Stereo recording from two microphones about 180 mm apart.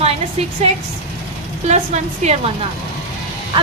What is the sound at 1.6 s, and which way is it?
Speech, 40° right (ahead or behind).